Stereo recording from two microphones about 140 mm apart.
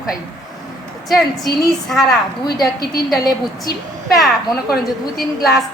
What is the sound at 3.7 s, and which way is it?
Speech, 90° left.